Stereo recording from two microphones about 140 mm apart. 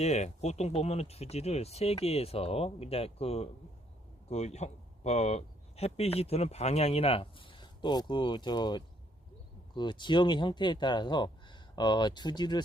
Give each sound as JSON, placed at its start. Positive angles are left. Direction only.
{"t": 0.0, "sound": "a man's voice", "side_deg": 55}